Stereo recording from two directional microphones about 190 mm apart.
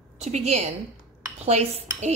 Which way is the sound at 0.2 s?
35° right (ahead or behind).